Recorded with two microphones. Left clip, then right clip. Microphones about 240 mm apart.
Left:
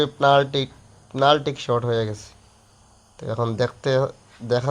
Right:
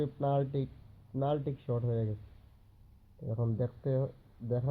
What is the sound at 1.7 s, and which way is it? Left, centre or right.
Speech, left.